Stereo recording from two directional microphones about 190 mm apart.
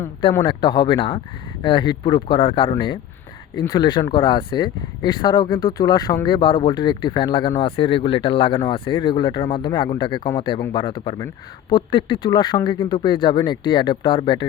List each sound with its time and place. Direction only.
0.0 s speech: 25° left (ahead or behind)